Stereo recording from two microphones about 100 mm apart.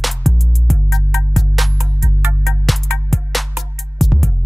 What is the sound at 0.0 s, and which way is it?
Music, centre (ahead or behind).